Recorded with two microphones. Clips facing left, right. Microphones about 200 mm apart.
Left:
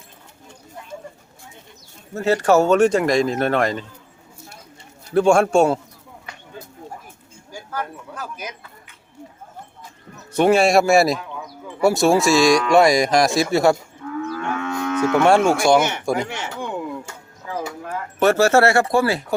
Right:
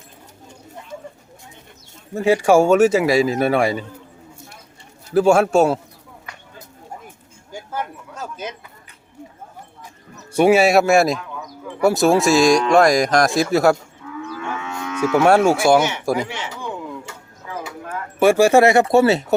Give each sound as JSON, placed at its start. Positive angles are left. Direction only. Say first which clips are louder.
{"t": 2.1, "sound": "speech", "louder": "right 2 dB", "side_deg": -10}
{"t": 5.1, "sound": "speech", "louder": "right 1 dB", "side_deg": -5}
{"t": 7.5, "sound": "speech", "louder": "right 1 dB", "side_deg": -20}
{"t": 10.3, "sound": "speech", "louder": "right 1 dB", "side_deg": -10}
{"t": 14.2, "sound": "livestock", "louder": "left 3 dB", "side_deg": 45}
{"t": 15.2, "sound": "speech", "louder": "right 2 dB", "side_deg": -5}
{"t": 15.8, "sound": "speech", "louder": "right 1 dB", "side_deg": 50}
{"t": 18.2, "sound": "speech", "louder": "right 3 dB", "side_deg": -10}